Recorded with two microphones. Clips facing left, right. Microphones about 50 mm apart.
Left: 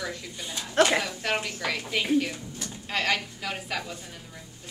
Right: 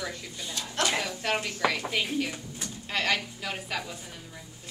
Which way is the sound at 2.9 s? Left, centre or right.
Centre.